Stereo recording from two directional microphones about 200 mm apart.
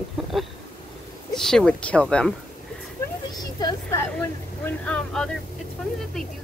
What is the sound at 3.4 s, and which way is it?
Vehicle, 20° left (ahead or behind).